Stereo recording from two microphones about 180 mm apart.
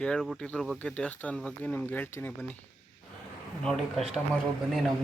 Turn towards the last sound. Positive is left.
turn(degrees=0)  # may be behind; listen again after turning